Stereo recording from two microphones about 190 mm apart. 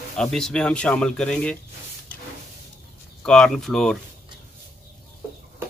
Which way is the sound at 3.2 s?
5° left (ahead or behind).